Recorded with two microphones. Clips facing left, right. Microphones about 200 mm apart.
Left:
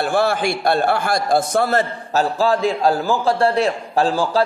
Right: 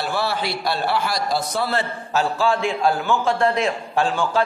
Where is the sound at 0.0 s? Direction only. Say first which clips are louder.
Left 6 dB; 50° left (ahead or behind).